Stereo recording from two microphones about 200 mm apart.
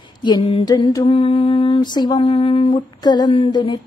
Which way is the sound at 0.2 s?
25° left (ahead or behind).